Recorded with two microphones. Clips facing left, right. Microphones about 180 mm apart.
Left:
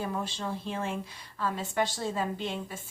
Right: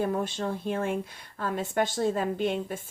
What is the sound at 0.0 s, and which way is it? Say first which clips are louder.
Speech: right 5 dB; 50° right (ahead or behind).